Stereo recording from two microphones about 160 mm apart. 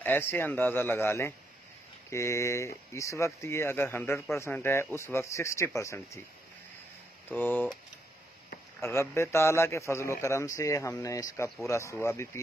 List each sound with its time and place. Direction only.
0.0 s speech: 15° left (ahead or behind)
7.2 s speech: 10° left (ahead or behind)
8.8 s speech: 15° left (ahead or behind)